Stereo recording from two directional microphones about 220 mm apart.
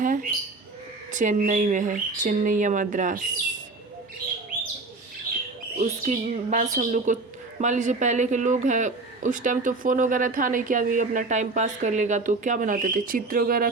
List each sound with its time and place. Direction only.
0.0 s bird: 35° right (ahead or behind)
1.1 s speech: 35° right (ahead or behind)
5.8 s speech: 30° right (ahead or behind)